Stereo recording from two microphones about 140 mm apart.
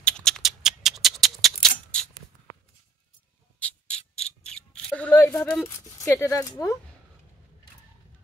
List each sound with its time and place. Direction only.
0.0 s a sound: 5° left (ahead or behind)
3.5 s insect: 10° left (ahead or behind)
5.9 s speech: 25° left (ahead or behind)